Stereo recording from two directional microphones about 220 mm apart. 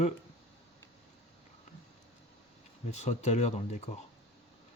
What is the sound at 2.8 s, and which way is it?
Speech, 30° left (ahead or behind).